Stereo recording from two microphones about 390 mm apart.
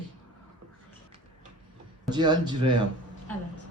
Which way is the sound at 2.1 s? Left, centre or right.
Centre.